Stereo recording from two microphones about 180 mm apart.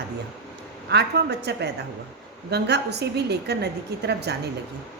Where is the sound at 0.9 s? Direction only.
70° right (ahead or behind).